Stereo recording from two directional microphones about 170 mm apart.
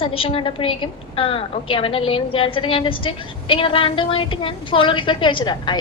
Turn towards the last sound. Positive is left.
turn(degrees=30)  # may be behind; listen again after turning